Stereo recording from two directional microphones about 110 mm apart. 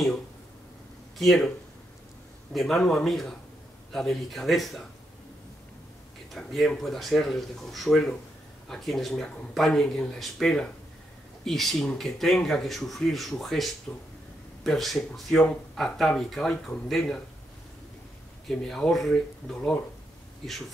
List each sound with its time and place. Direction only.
1.1 s speech: centre (ahead or behind)
2.5 s speech: 5° left (ahead or behind)
6.3 s speech: centre (ahead or behind)
13.9 s speech: 15° left (ahead or behind)
14.6 s speech: centre (ahead or behind)
18.7 s speech: centre (ahead or behind)